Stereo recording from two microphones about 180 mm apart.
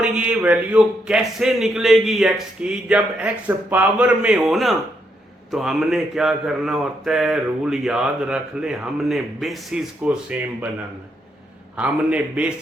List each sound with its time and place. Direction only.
0.0 s mantra: 5° right (ahead or behind)
11.8 s a man's voice: 5° right (ahead or behind)